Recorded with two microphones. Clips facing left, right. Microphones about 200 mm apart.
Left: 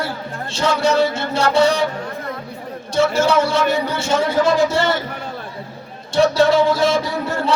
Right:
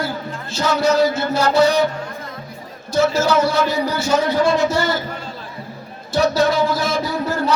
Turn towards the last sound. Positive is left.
turn(degrees=25)  # may be behind; listen again after turning